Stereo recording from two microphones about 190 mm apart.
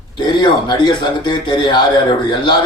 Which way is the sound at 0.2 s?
25° left (ahead or behind).